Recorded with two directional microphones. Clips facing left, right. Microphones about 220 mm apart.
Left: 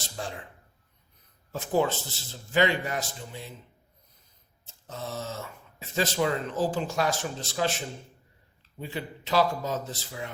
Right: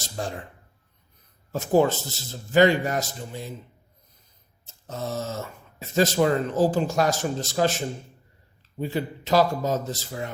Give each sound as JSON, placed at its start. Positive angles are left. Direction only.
{"t": 0.0, "sound": "a sound", "side_deg": -45}
{"t": 1.5, "sound": "speech", "side_deg": -45}
{"t": 4.6, "sound": "speech", "side_deg": -45}